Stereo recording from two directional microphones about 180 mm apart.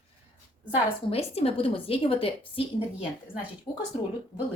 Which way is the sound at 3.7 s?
30° left (ahead or behind).